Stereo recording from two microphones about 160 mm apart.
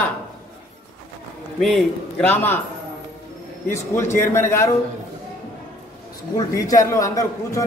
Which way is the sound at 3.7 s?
15° left (ahead or behind).